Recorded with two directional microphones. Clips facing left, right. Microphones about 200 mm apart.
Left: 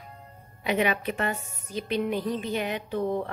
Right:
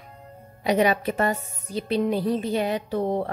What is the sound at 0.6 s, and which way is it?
A woman's voice, 40° right (ahead or behind).